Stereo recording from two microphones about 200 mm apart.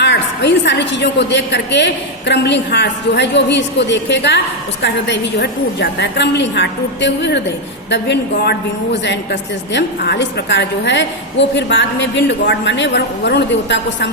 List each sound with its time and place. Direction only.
0.0 s a woman's voice: 60° left (ahead or behind)